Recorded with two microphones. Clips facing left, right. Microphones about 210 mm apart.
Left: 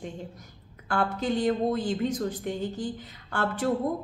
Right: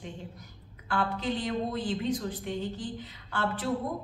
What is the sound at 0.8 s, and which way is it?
A woman's voice, 45° left (ahead or behind).